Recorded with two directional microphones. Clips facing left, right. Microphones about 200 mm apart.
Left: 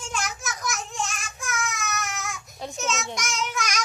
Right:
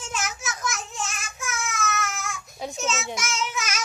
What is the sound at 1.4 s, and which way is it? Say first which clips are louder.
Child singing: left 1 dB; centre (ahead or behind).